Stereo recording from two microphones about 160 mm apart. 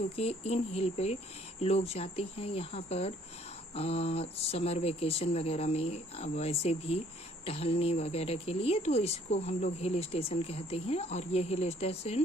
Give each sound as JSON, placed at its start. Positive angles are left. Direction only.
{"t": 0.2, "sound": "speech", "side_deg": 40}